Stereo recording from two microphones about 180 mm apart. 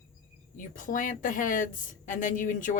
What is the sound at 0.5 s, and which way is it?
A woman's voice, 50° left (ahead or behind).